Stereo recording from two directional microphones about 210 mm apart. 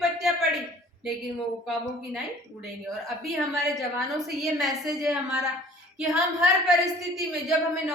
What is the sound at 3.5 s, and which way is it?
Speech, centre (ahead or behind).